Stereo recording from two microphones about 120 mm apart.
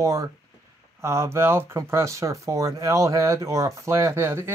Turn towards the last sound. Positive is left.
turn(degrees=-20)  # may be behind; listen again after turning